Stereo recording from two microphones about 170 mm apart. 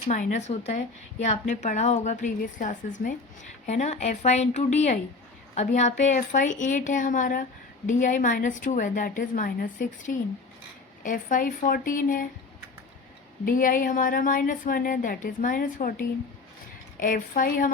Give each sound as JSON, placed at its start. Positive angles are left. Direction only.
{"t": 0.1, "sound": "a woman's voice", "side_deg": 45}
{"t": 13.4, "sound": "a woman's voice", "side_deg": 55}
{"t": 17.0, "sound": "a woman's voice", "side_deg": 55}